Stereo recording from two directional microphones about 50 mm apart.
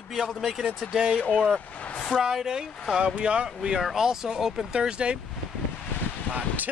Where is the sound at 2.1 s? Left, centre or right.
Centre.